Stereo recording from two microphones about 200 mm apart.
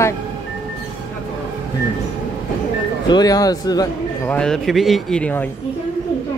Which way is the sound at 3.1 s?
20° left (ahead or behind).